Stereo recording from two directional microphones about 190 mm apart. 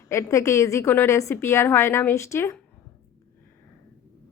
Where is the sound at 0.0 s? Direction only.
15° left (ahead or behind).